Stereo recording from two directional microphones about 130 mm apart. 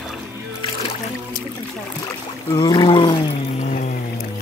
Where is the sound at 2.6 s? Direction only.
35° left (ahead or behind).